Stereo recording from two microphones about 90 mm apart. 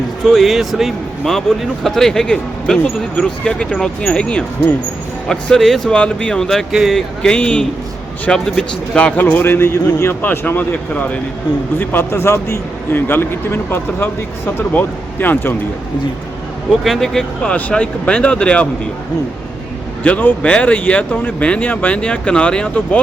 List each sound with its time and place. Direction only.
0.3 s a man's voice: centre (ahead or behind); by 15.5 s 20° left (ahead or behind)
16.8 s speech: centre (ahead or behind)
17.5 s speech: 15° left (ahead or behind)
20.1 s a man's voice: 20° left (ahead or behind)